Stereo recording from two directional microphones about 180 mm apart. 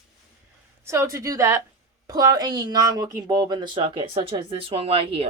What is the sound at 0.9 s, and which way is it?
A woman's voice, 15° right (ahead or behind).